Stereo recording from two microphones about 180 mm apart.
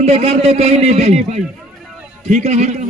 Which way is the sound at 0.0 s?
35° right (ahead or behind).